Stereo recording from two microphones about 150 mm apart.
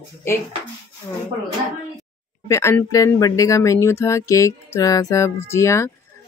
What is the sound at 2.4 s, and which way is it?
Speech, 20° left (ahead or behind).